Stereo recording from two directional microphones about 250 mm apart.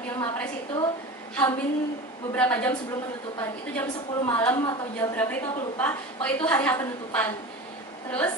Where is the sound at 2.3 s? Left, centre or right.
Centre.